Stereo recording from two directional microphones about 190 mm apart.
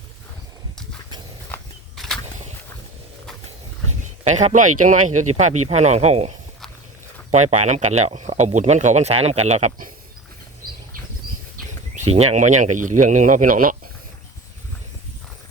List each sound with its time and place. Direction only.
1.5 s a sound: 10° left (ahead or behind)
4.2 s speech: 35° right (ahead or behind)
12.0 s speech: 35° right (ahead or behind)